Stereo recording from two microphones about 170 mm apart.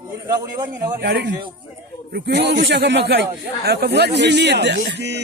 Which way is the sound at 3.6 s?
70° right (ahead or behind).